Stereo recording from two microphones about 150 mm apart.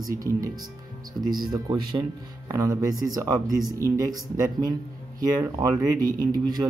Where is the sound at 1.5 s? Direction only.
30° right (ahead or behind).